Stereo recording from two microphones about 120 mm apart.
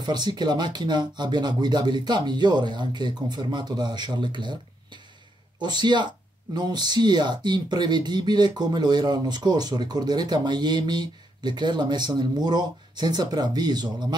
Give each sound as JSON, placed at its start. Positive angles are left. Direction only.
{"t": 0.0, "sound": "speech", "side_deg": -35}